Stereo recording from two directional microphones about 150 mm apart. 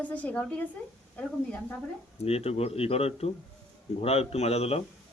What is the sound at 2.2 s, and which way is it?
Speech, 40° left (ahead or behind).